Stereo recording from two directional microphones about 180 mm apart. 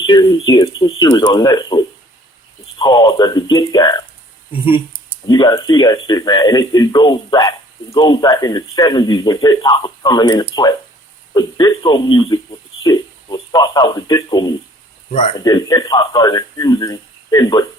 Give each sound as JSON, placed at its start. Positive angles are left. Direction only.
{"t": 0.0, "sound": "speech", "side_deg": 20}